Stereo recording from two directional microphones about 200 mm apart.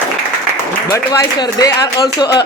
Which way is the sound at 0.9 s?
20° left (ahead or behind).